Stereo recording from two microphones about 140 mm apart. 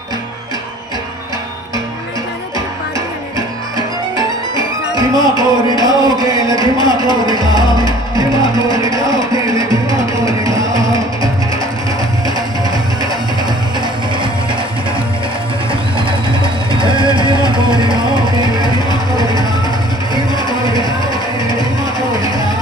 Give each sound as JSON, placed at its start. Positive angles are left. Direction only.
{"t": 3.3, "sound": "music", "side_deg": -30}
{"t": 13.7, "sound": "music", "side_deg": -35}
{"t": 16.0, "sound": "vehicle", "side_deg": -35}
{"t": 17.1, "sound": "music", "side_deg": -35}